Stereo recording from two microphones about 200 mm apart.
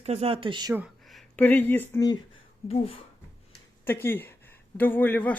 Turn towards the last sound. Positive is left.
turn(degrees=10)  # may be behind; listen again after turning